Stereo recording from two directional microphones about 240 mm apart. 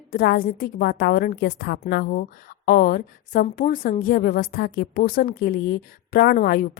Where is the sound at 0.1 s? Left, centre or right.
Left.